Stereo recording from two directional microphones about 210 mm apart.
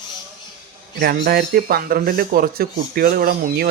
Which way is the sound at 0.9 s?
50° right (ahead or behind).